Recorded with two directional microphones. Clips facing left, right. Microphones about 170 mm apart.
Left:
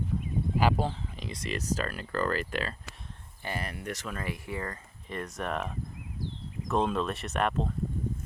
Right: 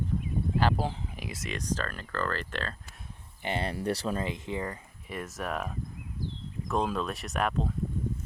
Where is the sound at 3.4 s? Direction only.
25° right (ahead or behind); by 7.7 s centre (ahead or behind).